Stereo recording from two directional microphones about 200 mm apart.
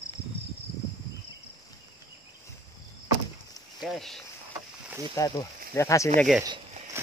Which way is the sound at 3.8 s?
Centre (ahead or behind).